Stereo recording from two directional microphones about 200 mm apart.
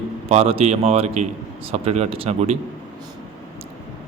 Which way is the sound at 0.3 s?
30° right (ahead or behind).